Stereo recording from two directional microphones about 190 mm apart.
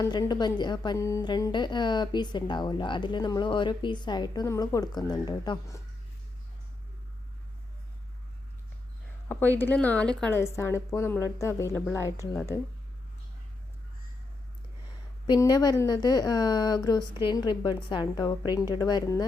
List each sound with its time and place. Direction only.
0.0 s a woman's voice: 20° left (ahead or behind)
9.3 s a woman's voice: 10° left (ahead or behind)
15.3 s a woman's voice: 20° left (ahead or behind)